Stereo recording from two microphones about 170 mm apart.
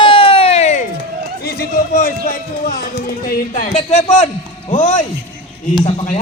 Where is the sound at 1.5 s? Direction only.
60° left (ahead or behind).